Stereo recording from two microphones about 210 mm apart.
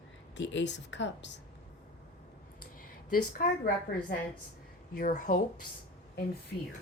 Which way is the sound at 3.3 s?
45° left (ahead or behind).